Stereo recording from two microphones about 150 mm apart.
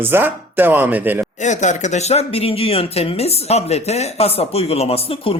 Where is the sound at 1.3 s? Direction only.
50° left (ahead or behind).